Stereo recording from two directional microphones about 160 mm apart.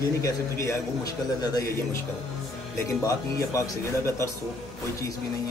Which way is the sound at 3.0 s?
20° left (ahead or behind).